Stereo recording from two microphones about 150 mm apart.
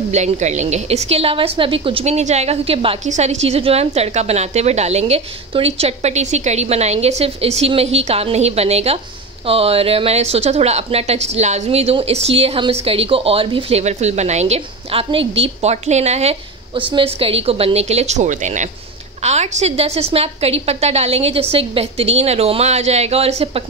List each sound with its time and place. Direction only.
0.1 s a woman's voice: 50° right (ahead or behind)